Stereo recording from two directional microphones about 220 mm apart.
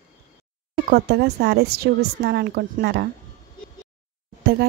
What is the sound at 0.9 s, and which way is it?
A woman's voice, 45° right (ahead or behind).